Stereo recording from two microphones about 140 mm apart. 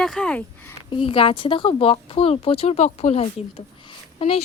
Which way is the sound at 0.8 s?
40° left (ahead or behind).